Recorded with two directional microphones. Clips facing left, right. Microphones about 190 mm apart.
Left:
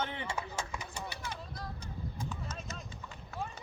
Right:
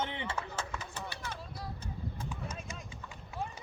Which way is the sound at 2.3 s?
10° right (ahead or behind).